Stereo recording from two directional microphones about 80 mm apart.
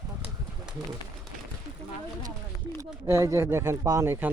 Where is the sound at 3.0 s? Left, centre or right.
Right.